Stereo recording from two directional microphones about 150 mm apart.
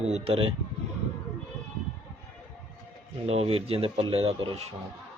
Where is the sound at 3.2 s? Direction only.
45° right (ahead or behind).